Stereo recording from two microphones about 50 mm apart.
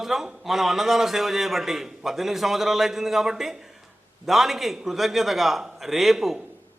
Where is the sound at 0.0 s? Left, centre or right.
Centre.